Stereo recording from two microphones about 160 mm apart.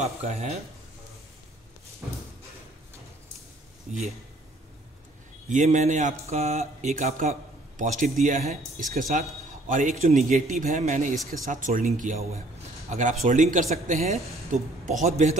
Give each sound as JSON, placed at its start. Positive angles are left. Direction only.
{"t": 0.0, "sound": "speech", "side_deg": -45}
{"t": 3.9, "sound": "speech", "side_deg": -50}
{"t": 5.5, "sound": "a man's voice", "side_deg": -50}